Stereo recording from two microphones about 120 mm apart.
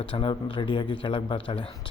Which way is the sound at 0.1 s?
45° left (ahead or behind).